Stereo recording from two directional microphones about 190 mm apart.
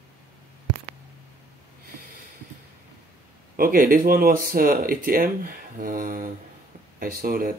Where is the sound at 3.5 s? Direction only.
50° right (ahead or behind).